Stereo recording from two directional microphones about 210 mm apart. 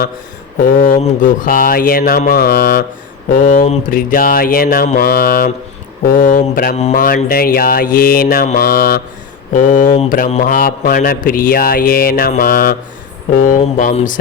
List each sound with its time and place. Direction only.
0.6 s a man's voice: 40° left (ahead or behind)